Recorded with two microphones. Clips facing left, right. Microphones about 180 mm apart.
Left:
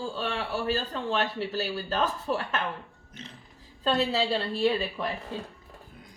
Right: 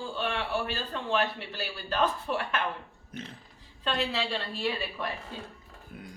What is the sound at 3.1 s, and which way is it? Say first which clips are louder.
Mechanisms: right 5 dB; 55° right (ahead or behind).